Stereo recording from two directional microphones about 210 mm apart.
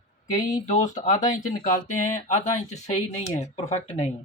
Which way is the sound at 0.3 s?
15° left (ahead or behind).